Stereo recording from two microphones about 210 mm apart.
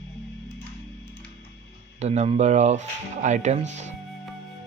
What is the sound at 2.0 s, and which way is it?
Speech, 30° right (ahead or behind).